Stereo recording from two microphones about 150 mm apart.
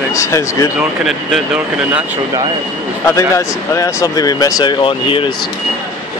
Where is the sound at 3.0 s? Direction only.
20° left (ahead or behind).